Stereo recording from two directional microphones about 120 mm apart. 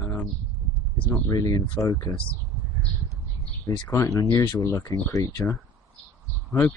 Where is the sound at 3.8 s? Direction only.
25° left (ahead or behind).